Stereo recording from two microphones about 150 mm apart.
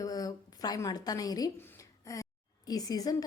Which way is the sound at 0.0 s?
25° left (ahead or behind).